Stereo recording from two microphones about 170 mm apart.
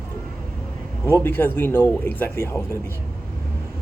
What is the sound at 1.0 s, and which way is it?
Speech, 10° left (ahead or behind).